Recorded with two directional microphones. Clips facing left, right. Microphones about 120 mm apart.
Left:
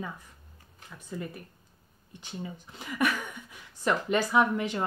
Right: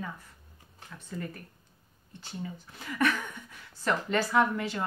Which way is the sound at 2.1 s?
15° left (ahead or behind).